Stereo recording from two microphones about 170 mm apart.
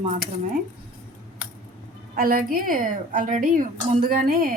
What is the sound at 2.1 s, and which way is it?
A woman's voice, 60° right (ahead or behind).